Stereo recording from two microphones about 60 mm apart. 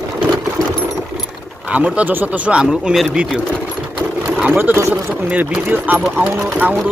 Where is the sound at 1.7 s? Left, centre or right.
Right.